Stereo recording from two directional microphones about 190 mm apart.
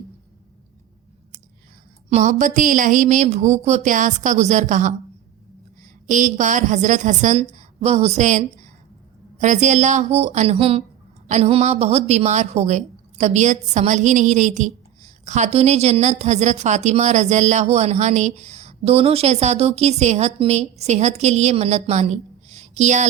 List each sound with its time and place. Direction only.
2.0 s a woman's voice: 40° right (ahead or behind)
6.1 s a woman's voice: 40° right (ahead or behind)